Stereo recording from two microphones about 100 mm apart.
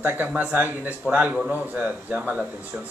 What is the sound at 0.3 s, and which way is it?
Speech, 15° right (ahead or behind).